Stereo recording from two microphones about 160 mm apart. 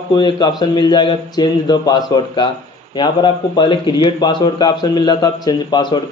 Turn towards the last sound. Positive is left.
turn(degrees=25)  # may be behind; listen again after turning